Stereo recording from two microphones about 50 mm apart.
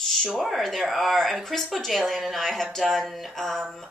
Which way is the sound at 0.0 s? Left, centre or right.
Centre.